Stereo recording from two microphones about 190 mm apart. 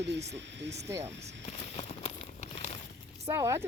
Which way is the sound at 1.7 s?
35° left (ahead or behind).